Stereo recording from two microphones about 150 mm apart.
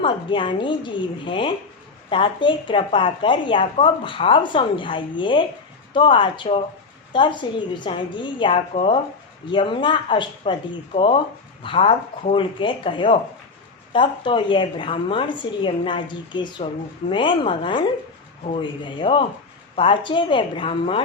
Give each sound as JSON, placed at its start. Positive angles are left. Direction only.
{"t": 0.0, "sound": "speech", "side_deg": 35}